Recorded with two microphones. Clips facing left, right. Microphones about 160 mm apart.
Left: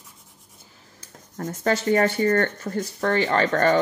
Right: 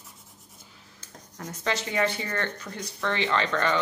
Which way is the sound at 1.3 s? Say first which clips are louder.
Left 7 dB; 50° left (ahead or behind).